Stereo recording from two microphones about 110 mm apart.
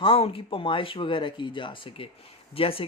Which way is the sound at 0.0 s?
55° left (ahead or behind).